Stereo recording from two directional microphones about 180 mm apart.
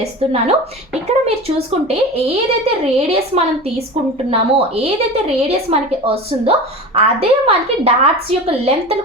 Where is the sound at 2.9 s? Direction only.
35° right (ahead or behind).